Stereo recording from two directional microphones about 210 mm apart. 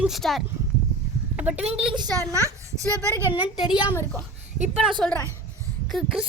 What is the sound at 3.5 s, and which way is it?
Speech, 5° right (ahead or behind).